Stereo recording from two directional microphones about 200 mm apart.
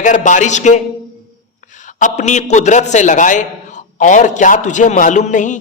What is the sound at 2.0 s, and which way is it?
A man's voice, 35° left (ahead or behind).